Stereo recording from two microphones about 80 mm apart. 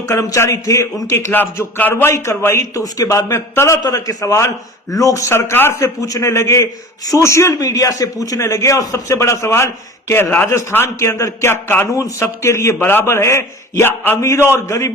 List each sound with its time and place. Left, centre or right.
0.3 s a man's voice: left
3.8 s a man's voice: left
5.3 s a man's voice: left